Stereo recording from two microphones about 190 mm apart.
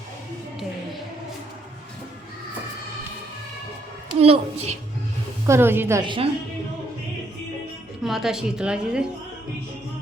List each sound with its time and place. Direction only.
4.2 s a woman's voice: 30° right (ahead or behind)
5.5 s a woman's voice: 10° right (ahead or behind)
6.0 s a woman's voice: 25° right (ahead or behind)
8.0 s a woman's voice: centre (ahead or behind)